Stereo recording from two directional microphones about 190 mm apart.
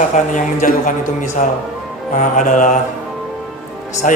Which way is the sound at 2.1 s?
45° left (ahead or behind).